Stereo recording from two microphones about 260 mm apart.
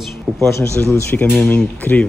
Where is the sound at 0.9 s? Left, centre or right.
Centre.